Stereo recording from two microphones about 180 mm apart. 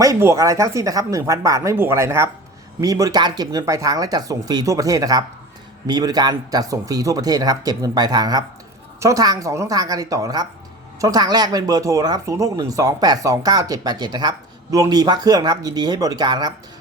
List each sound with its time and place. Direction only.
0.0 s speech: 15° right (ahead or behind)